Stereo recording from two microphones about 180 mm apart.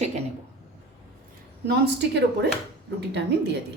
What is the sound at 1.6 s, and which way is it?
Speech, 65° right (ahead or behind).